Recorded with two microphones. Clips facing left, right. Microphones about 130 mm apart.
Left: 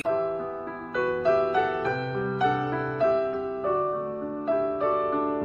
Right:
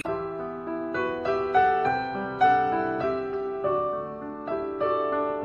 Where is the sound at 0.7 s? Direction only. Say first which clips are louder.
Even; centre (ahead or behind).